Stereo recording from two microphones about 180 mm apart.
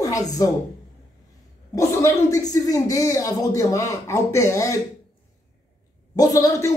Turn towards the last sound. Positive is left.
turn(degrees=20)  # may be behind; listen again after turning